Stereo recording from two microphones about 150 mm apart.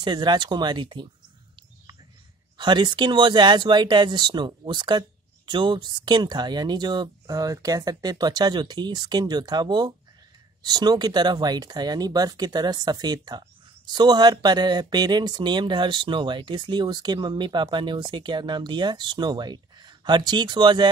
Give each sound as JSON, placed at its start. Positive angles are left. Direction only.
{"t": 0.0, "sound": "speech", "side_deg": -30}
{"t": 2.5, "sound": "speech", "side_deg": -30}